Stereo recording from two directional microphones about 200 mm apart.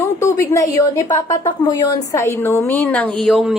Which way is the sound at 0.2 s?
15° left (ahead or behind).